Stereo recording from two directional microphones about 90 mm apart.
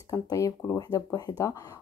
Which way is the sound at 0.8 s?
45° left (ahead or behind).